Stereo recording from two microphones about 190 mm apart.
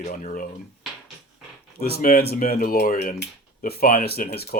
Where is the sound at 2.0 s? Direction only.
55° left (ahead or behind).